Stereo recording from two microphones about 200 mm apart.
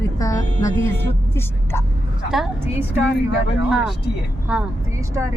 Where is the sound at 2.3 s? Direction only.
Centre (ahead or behind).